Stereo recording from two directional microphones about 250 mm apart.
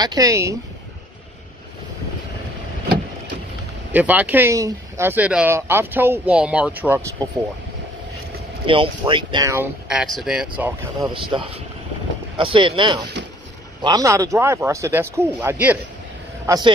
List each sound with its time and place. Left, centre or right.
0.0 s speech: centre
3.9 s speech: centre
8.6 s speech: right; by 11.1 s centre
11.2 s speech: centre